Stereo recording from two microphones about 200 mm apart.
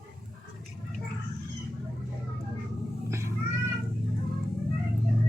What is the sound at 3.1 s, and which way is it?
Cat, 15° right (ahead or behind).